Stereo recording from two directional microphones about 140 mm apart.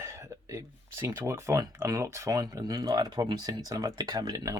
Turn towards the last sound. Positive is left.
turn(degrees=-25)  # may be behind; listen again after turning